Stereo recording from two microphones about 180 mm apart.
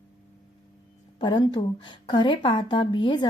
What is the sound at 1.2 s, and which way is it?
A woman's voice, 25° left (ahead or behind).